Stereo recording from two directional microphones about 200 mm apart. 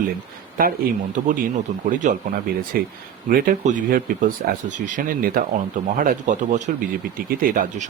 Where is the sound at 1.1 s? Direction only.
40° right (ahead or behind).